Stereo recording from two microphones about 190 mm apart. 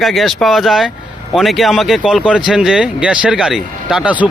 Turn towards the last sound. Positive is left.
turn(degrees=-5)  # may be behind; listen again after turning